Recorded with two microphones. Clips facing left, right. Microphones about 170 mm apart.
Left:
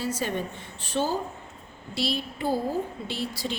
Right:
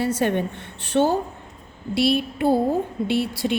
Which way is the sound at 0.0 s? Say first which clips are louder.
Right 7 dB; 60° right (ahead or behind).